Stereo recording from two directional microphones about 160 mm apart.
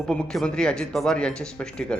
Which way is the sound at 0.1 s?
5° left (ahead or behind).